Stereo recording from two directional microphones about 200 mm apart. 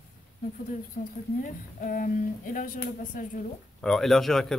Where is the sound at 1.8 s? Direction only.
40° left (ahead or behind).